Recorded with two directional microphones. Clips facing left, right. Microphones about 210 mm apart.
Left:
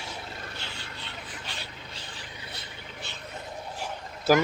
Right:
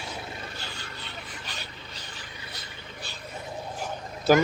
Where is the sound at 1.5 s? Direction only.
25° left (ahead or behind).